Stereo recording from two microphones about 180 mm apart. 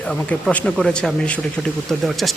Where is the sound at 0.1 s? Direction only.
5° left (ahead or behind).